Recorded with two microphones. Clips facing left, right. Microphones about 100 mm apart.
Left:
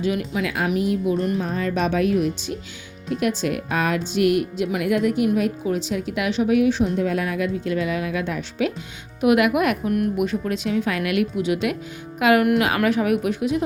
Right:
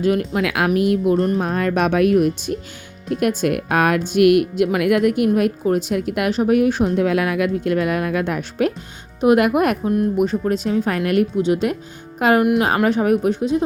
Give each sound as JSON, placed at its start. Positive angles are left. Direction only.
{"t": 0.0, "sound": "speech", "side_deg": -50}
{"t": 1.1, "sound": "speech", "side_deg": -35}
{"t": 1.4, "sound": "speech", "side_deg": -60}
{"t": 9.2, "sound": "speech", "side_deg": -35}